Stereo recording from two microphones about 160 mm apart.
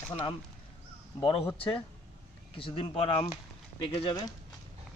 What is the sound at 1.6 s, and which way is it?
Speech, 35° left (ahead or behind).